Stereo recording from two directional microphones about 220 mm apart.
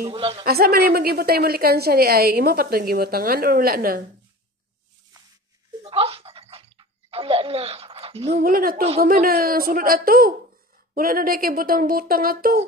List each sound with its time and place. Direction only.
0.1 s a man's voice: 25° right (ahead or behind)
0.5 s a woman's voice: 45° right (ahead or behind)
5.8 s a sound: 25° right (ahead or behind)
8.4 s speech: 40° right (ahead or behind)